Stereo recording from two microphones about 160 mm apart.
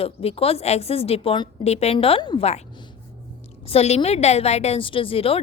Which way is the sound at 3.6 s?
40° left (ahead or behind).